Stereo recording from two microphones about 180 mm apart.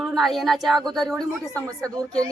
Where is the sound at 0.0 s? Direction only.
Centre (ahead or behind).